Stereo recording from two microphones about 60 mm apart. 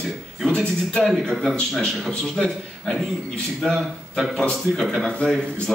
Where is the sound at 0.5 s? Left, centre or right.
Centre.